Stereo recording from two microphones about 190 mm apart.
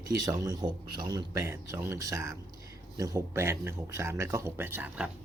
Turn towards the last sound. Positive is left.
turn(degrees=-5)  # may be behind; listen again after turning